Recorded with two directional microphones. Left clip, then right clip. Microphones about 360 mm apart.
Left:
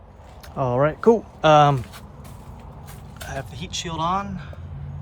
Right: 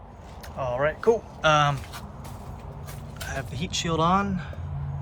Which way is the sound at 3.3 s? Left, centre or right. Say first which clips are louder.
Even; centre.